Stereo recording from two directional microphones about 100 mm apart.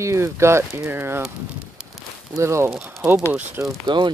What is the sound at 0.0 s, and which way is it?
Speech, 30° right (ahead or behind).